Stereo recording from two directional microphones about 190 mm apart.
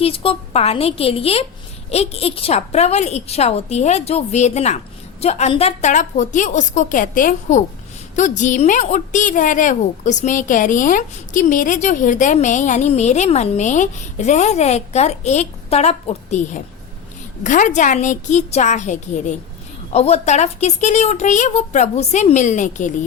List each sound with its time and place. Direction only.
0.0 s a woman's voice: 30° left (ahead or behind)
17.4 s a woman's voice: 40° left (ahead or behind)